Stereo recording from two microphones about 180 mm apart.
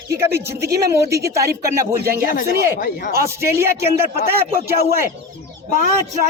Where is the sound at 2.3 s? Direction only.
50° left (ahead or behind).